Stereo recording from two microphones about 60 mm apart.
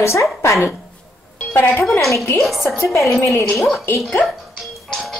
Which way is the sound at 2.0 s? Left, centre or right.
Left.